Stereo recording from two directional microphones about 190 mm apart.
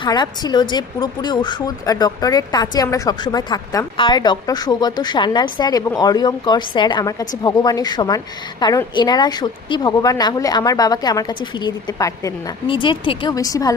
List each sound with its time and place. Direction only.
0.0 s speech: 20° left (ahead or behind)